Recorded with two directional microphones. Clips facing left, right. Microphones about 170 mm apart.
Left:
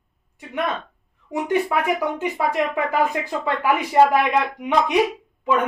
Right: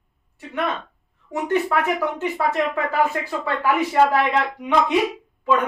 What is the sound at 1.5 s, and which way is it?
Speech, 15° left (ahead or behind).